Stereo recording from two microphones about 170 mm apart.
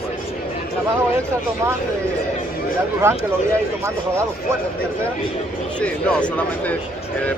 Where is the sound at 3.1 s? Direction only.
15° right (ahead or behind).